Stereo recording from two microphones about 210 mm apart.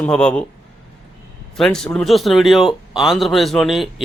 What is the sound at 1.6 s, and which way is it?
Speech, 5° left (ahead or behind).